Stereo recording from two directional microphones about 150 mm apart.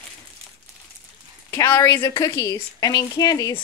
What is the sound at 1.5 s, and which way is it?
A woman's voice, 20° left (ahead or behind).